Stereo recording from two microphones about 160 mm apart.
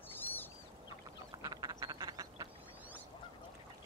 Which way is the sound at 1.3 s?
25° right (ahead or behind).